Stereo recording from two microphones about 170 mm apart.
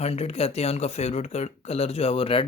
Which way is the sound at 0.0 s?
35° left (ahead or behind).